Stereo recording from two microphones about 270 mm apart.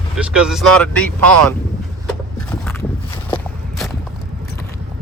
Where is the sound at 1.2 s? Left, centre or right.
Right.